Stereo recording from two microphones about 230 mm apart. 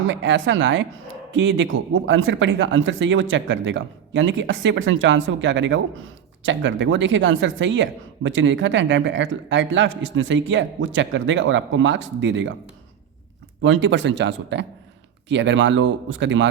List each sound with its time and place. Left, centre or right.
0.1 s speech: right
13.6 s speech: right